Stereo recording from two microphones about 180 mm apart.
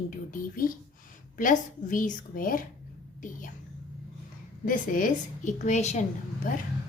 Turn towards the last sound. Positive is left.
turn(degrees=45)  # may be behind; listen again after turning